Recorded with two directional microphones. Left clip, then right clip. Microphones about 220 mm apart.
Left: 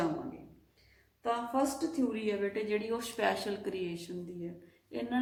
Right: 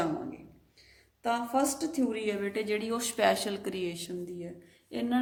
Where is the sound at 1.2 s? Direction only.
45° right (ahead or behind).